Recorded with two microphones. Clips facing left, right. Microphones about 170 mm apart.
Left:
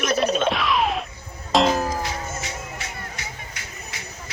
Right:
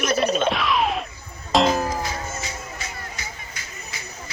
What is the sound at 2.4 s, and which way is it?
Music, 70° left (ahead or behind).